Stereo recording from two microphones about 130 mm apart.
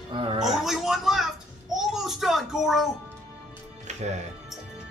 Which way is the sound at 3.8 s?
65° right (ahead or behind).